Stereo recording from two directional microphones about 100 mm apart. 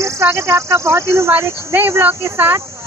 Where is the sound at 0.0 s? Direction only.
25° right (ahead or behind).